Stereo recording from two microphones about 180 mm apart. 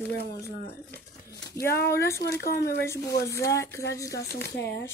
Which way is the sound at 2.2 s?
65° left (ahead or behind).